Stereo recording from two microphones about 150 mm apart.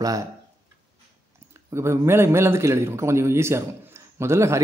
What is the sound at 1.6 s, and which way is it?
A man's voice, 20° right (ahead or behind).